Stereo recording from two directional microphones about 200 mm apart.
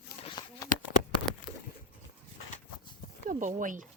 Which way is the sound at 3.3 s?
40° right (ahead or behind).